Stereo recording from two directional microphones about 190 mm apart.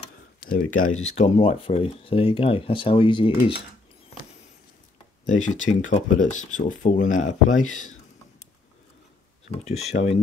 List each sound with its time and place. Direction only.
0.4 s speech: 50° left (ahead or behind); by 3.3 s 25° left (ahead or behind)
5.2 s speech: 40° left (ahead or behind)
9.5 s speech: 35° left (ahead or behind)